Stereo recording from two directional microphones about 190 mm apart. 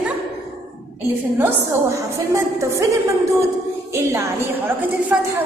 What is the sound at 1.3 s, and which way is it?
A woman's voice, 10° right (ahead or behind).